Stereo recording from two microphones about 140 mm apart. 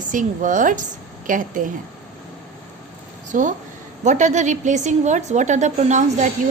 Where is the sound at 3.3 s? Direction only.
70° right (ahead or behind).